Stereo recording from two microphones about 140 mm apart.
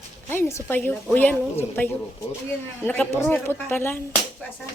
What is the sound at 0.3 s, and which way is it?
A woman's voice, 15° left (ahead or behind).